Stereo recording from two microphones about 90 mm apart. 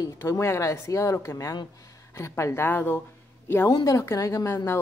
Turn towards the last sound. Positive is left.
turn(degrees=30)  # may be behind; listen again after turning